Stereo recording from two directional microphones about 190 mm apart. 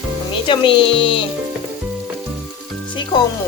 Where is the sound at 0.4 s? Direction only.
25° left (ahead or behind).